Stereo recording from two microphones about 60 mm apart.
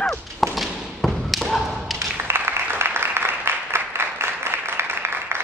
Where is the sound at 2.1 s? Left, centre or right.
Right.